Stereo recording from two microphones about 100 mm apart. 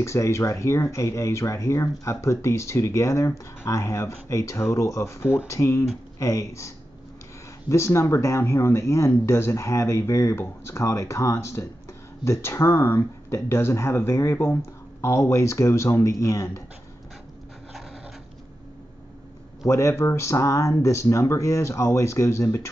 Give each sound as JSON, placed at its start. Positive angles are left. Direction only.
{"t": 0.0, "sound": "speech", "side_deg": 30}
{"t": 7.7, "sound": "speech", "side_deg": 30}
{"t": 19.6, "sound": "speech", "side_deg": 30}